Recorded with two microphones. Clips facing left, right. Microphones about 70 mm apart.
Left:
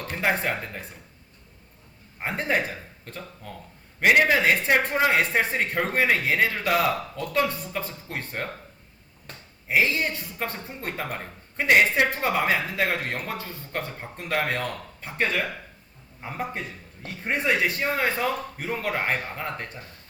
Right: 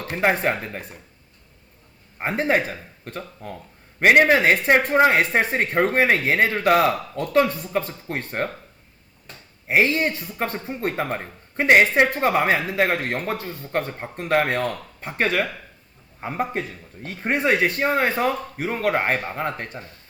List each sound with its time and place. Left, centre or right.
0.1 s speech: right
2.1 s speech: right
9.6 s speech: right
16.2 s speech: right
16.6 s speech: right